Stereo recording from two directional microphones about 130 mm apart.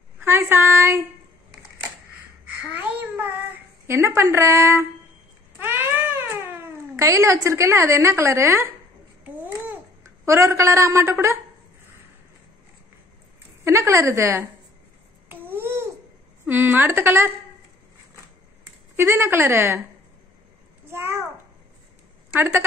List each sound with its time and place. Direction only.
0.2 s a sound: 20° right (ahead or behind)
2.4 s a sound: 10° right (ahead or behind)
3.8 s a woman's voice: 20° right (ahead or behind)
5.6 s cat: 15° right (ahead or behind)
9.2 s babbling: 15° right (ahead or behind)
13.7 s a woman's voice: 20° right (ahead or behind)
15.2 s babbling: 15° right (ahead or behind)
16.4 s a woman's voice: 15° right (ahead or behind)
18.9 s a woman's voice: 20° right (ahead or behind)
20.9 s a sound: 20° right (ahead or behind)
22.4 s a woman's voice: 15° right (ahead or behind)